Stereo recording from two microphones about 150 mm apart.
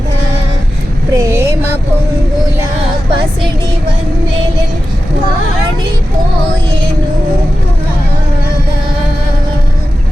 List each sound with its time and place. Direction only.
1.1 s vehicle: 20° right (ahead or behind)